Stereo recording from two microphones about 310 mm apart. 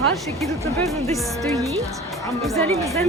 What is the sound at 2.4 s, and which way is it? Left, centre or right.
Speech, centre.